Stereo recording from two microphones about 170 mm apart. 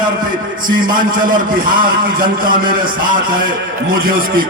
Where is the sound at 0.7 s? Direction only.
25° right (ahead or behind).